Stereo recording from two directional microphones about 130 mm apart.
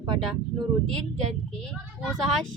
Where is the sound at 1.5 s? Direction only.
5° left (ahead or behind).